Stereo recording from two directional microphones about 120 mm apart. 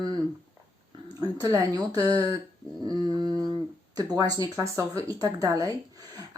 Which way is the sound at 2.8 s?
30° right (ahead or behind).